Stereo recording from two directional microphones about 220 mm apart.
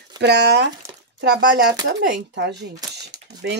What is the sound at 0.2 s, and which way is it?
Speech, 50° right (ahead or behind).